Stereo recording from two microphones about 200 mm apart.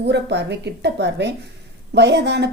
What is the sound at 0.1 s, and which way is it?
A woman's voice, 60° right (ahead or behind).